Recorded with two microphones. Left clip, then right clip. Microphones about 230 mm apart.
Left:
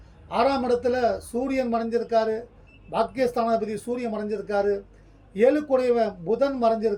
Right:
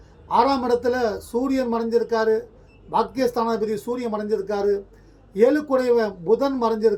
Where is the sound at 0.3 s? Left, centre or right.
Centre.